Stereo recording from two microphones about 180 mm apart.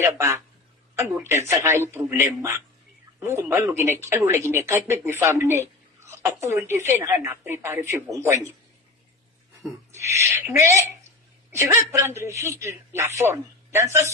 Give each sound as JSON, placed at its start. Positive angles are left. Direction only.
{"t": 1.0, "sound": "speech", "side_deg": -15}
{"t": 9.6, "sound": "a sound", "side_deg": -15}
{"t": 10.2, "sound": "speech", "side_deg": -15}